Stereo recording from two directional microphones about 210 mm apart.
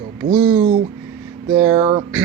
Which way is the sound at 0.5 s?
35° right (ahead or behind).